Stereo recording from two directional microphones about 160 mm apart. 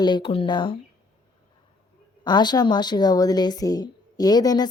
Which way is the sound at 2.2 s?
25° left (ahead or behind).